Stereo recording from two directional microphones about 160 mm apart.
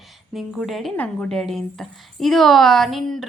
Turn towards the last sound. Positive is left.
turn(degrees=0)  # may be behind; listen again after turning